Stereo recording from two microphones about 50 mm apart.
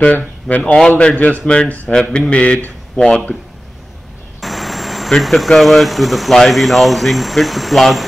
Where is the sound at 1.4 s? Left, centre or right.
Centre.